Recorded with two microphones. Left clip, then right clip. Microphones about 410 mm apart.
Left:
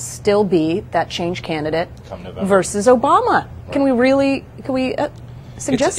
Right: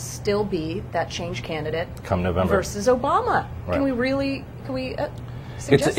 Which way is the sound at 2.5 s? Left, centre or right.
Left.